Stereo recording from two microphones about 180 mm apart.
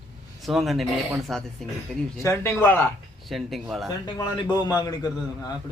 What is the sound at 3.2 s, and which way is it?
Speech, centre (ahead or behind).